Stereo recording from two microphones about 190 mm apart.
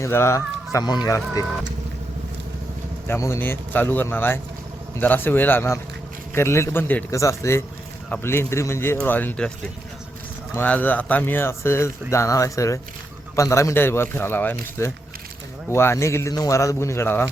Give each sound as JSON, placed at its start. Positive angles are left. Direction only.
{"t": 0.0, "sound": "speech", "side_deg": 15}
{"t": 3.1, "sound": "speech", "side_deg": 15}
{"t": 10.5, "sound": "speech", "side_deg": 10}